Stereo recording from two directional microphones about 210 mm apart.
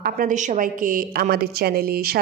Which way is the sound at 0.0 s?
40° right (ahead or behind).